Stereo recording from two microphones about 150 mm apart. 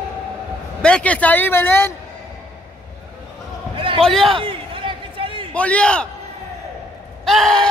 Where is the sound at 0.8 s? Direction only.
10° left (ahead or behind).